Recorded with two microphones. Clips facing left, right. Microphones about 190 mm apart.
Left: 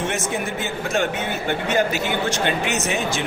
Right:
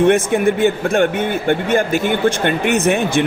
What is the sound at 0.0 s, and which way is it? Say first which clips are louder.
Speech: right 12 dB; 55° right (ahead or behind).